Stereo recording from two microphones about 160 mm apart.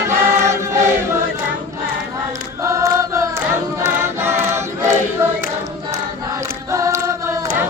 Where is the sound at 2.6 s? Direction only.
20° right (ahead or behind).